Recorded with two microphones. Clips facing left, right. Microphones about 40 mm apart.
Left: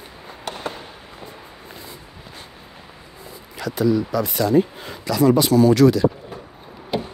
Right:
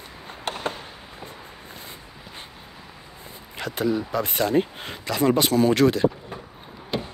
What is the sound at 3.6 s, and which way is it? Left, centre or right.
Speech, right.